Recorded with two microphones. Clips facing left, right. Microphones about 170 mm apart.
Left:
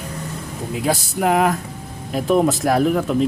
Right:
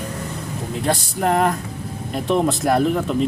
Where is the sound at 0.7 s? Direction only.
5° left (ahead or behind).